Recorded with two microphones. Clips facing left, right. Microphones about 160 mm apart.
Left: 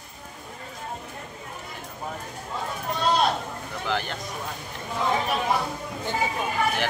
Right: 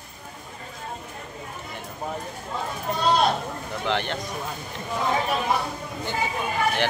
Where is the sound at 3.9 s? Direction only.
5° left (ahead or behind).